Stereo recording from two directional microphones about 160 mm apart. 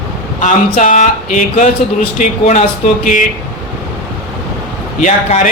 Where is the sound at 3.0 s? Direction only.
55° left (ahead or behind).